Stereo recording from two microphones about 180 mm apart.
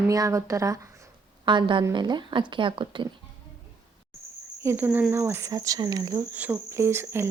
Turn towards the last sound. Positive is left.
turn(degrees=-15)  # may be behind; listen again after turning